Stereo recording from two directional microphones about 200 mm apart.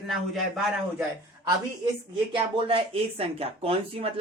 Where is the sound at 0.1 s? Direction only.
Centre (ahead or behind).